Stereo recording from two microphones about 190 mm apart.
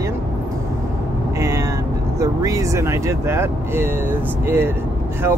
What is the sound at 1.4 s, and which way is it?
Speech, 15° right (ahead or behind).